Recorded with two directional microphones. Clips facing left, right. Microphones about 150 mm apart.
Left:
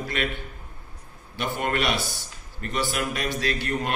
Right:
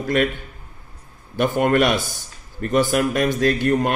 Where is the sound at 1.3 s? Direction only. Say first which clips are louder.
Right 9 dB; 50° right (ahead or behind).